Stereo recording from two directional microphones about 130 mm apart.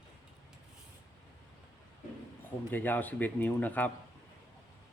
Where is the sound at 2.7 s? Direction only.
15° left (ahead or behind).